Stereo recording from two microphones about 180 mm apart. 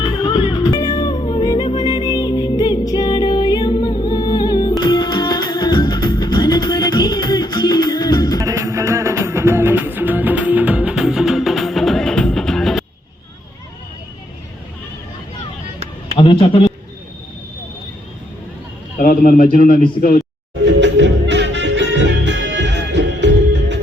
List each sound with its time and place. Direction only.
0.0 s music: 25° left (ahead or behind)
8.4 s music: 20° right (ahead or behind); by 12.8 s centre (ahead or behind)
16.1 s a sound: 25° left (ahead or behind)
18.9 s a man's voice: 50° left (ahead or behind)
20.8 s music: 75° right (ahead or behind)